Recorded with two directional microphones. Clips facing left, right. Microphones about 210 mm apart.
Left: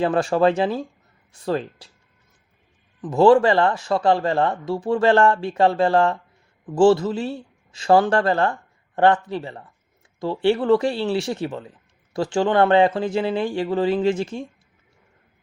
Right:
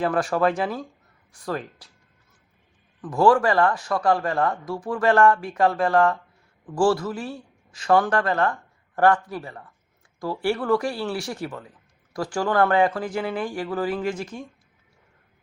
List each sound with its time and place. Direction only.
0.0 s a man's voice: 25° left (ahead or behind)
3.0 s a man's voice: 25° left (ahead or behind)